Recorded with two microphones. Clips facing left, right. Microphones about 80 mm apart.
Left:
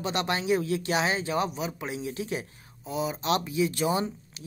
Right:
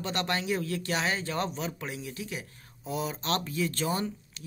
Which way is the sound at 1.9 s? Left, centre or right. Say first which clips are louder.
Left 5 dB; left.